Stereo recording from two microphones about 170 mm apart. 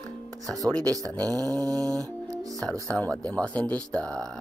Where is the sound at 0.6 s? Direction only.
20° right (ahead or behind).